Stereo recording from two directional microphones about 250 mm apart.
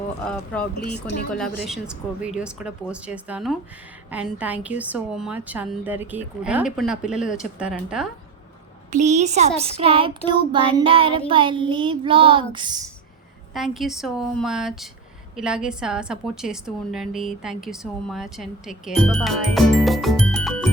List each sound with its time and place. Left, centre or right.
0.3 s a woman's voice: centre
8.9 s a child's voice: right
13.5 s a woman's voice: centre